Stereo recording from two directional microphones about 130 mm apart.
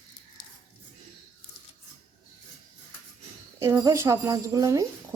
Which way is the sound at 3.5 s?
25° right (ahead or behind).